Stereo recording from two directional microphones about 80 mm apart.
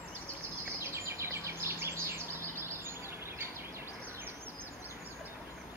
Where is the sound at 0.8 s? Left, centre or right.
Right.